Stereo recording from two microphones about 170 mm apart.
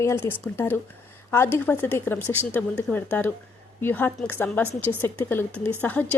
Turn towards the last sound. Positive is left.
turn(degrees=10)  # may be behind; listen again after turning